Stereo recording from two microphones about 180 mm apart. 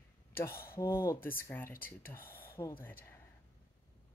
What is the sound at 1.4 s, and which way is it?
Speech, 15° left (ahead or behind).